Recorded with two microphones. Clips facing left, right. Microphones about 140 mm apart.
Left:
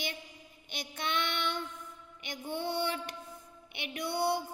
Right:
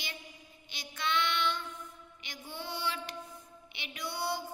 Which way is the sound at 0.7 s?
55° left (ahead or behind).